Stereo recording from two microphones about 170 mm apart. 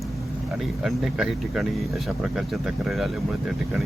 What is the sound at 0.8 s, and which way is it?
Speech, 5° right (ahead or behind).